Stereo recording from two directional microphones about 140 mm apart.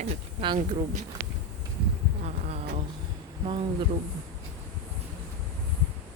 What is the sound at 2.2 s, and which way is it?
Insect, 50° right (ahead or behind).